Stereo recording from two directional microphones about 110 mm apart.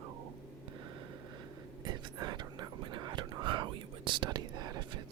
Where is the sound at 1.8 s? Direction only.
40° right (ahead or behind).